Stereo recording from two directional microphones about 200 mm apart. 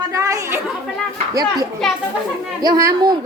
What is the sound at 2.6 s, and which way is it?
Speech, 20° right (ahead or behind).